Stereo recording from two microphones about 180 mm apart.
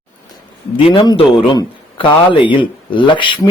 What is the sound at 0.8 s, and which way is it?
A man's voice, 30° left (ahead or behind).